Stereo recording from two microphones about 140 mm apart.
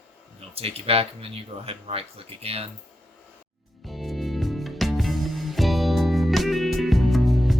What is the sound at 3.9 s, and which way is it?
Music, centre (ahead or behind).